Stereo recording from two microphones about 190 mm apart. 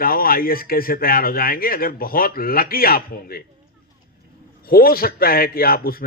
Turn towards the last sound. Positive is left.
turn(degrees=50)  # may be behind; listen again after turning